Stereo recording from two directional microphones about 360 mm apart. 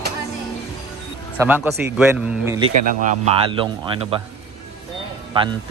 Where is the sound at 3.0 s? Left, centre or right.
Centre.